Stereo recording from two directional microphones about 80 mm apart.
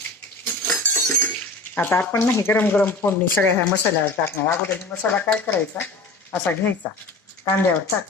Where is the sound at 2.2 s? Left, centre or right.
Left.